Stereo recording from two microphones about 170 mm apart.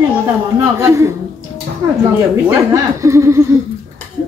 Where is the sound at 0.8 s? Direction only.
15° right (ahead or behind).